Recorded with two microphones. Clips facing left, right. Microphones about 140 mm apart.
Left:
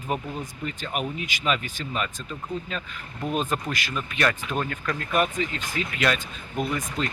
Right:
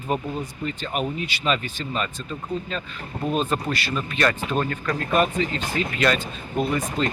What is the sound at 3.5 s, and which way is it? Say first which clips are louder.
Speech: right 3 dB; 15° left (ahead or behind).